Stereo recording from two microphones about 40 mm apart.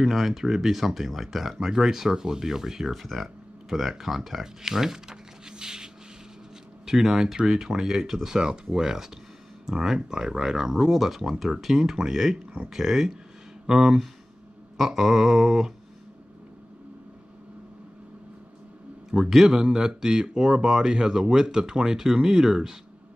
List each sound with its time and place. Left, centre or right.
0.0 s speech: centre
6.9 s speech: centre
19.0 s speech: centre